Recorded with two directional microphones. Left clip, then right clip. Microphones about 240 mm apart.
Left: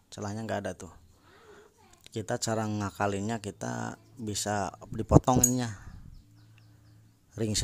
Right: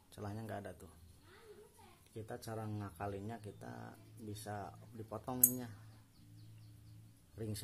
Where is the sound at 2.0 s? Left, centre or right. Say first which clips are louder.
Left 16 dB; left.